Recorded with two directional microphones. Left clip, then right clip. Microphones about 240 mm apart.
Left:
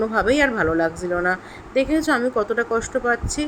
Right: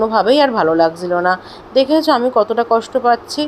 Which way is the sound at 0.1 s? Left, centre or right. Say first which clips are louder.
Right 6 dB; centre.